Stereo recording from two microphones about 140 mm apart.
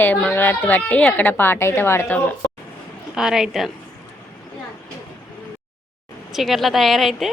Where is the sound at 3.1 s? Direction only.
5° right (ahead or behind).